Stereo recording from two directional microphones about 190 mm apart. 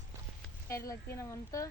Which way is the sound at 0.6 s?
15° left (ahead or behind).